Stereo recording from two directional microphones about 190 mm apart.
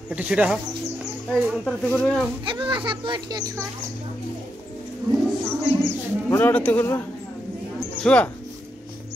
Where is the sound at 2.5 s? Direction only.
25° right (ahead or behind).